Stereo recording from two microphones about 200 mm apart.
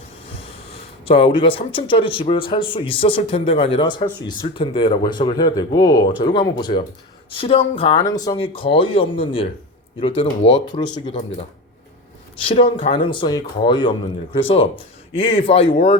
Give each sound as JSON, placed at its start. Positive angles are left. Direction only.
{"t": 0.3, "sound": "a sound", "side_deg": 30}
{"t": 2.3, "sound": "a man's voice", "side_deg": 25}
{"t": 12.5, "sound": "a man's voice", "side_deg": 30}